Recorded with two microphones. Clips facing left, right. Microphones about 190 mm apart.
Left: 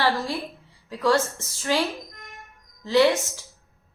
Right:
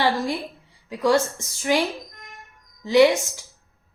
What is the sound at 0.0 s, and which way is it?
A woman's voice, 15° right (ahead or behind).